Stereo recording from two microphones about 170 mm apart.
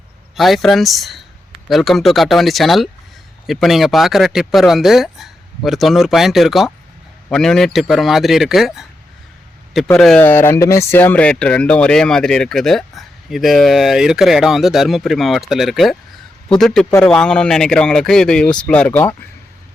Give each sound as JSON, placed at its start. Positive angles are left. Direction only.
{"t": 0.3, "sound": "speech", "side_deg": 0}